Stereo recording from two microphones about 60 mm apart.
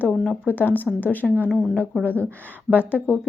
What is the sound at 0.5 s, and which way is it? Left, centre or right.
Speech, left.